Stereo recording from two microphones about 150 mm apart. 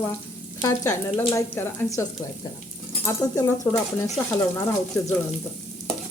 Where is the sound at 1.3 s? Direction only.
15° left (ahead or behind).